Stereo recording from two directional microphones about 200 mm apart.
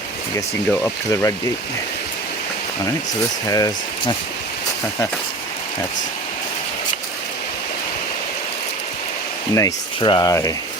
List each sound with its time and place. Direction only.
0.3 s speech: 15° left (ahead or behind)
3.4 s speech: 15° left (ahead or behind)
9.6 s speech: 20° left (ahead or behind)